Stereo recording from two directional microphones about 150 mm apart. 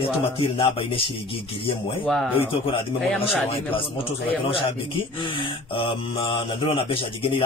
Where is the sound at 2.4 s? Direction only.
35° left (ahead or behind).